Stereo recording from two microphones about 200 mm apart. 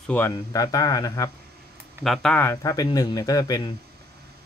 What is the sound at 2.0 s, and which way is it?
Speech, centre (ahead or behind).